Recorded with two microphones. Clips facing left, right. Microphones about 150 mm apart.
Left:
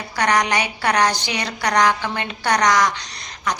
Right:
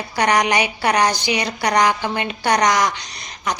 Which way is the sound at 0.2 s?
15° right (ahead or behind).